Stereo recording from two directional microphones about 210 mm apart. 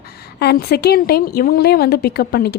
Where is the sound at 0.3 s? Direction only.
50° left (ahead or behind).